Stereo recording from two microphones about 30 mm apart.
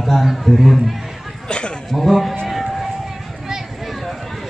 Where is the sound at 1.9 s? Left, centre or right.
Centre.